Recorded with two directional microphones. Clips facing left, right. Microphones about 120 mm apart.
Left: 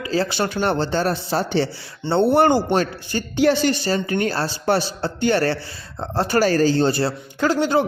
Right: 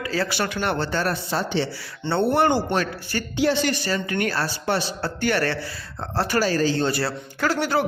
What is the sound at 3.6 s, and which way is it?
A man's voice, 30° left (ahead or behind).